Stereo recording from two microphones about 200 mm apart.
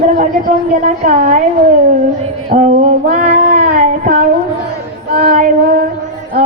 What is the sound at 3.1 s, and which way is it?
Child singing, 40° right (ahead or behind).